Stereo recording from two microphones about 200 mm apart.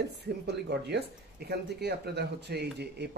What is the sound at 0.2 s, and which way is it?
Speech, 55° right (ahead or behind).